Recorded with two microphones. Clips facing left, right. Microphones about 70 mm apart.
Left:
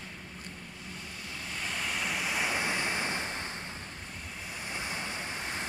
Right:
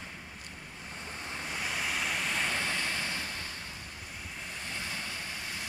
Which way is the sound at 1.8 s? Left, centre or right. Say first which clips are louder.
Left 1 dB; centre.